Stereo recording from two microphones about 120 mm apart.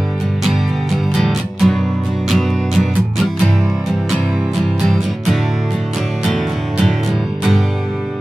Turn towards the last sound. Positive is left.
turn(degrees=0)  # may be behind; listen again after turning